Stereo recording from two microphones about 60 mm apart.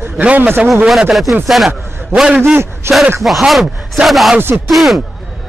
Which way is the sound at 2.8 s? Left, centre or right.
Right.